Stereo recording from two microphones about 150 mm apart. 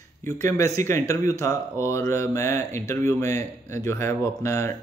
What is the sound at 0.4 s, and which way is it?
A man's voice, 20° left (ahead or behind).